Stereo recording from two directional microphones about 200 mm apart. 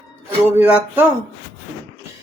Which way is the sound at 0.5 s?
10° right (ahead or behind).